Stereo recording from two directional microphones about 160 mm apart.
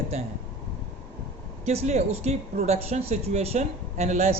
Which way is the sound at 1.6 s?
40° right (ahead or behind).